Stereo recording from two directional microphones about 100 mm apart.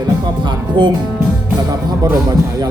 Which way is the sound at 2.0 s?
40° right (ahead or behind).